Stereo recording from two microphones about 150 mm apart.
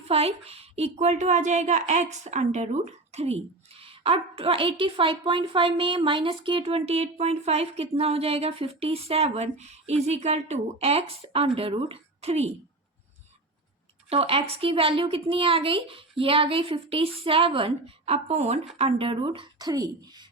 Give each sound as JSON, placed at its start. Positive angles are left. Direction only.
{"t": 0.1, "sound": "a woman's voice", "side_deg": -40}
{"t": 14.1, "sound": "a woman's voice", "side_deg": -40}